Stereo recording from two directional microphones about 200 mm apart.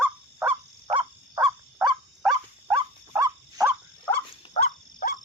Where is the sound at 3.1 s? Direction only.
15° right (ahead or behind).